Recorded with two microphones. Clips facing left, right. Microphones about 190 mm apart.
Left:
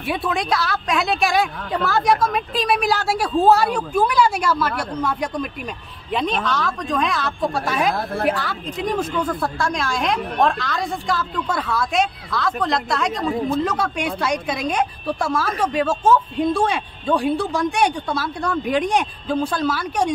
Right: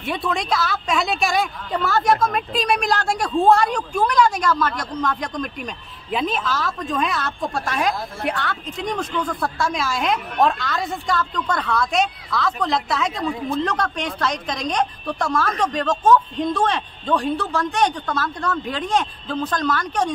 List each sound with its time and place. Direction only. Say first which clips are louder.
0.0 s a woman's voice: left 1 dB; 5° left (ahead or behind)
7.9 s a woman's voice: left 5 dB; 60° left (ahead or behind)
8.3 s speech: left 3 dB; centre (ahead or behind)